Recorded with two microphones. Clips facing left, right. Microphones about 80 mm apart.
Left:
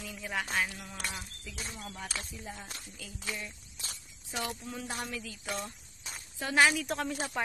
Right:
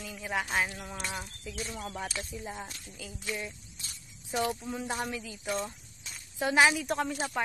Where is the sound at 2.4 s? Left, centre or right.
Centre.